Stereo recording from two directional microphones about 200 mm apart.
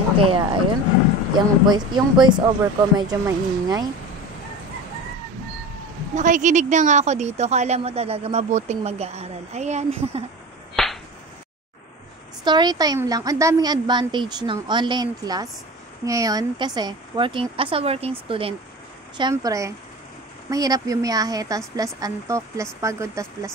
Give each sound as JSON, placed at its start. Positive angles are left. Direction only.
{"t": 0.2, "sound": "a woman's voice", "side_deg": -25}
{"t": 6.1, "sound": "speech", "side_deg": -40}
{"t": 10.8, "sound": "whip", "side_deg": 0}
{"t": 12.4, "sound": "a woman's voice", "side_deg": -20}